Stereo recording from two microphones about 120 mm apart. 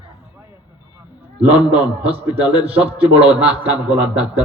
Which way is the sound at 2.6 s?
55° right (ahead or behind).